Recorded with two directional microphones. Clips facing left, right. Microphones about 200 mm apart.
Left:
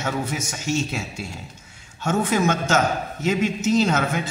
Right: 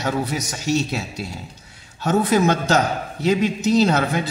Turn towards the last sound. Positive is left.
turn(degrees=-35)  # may be behind; listen again after turning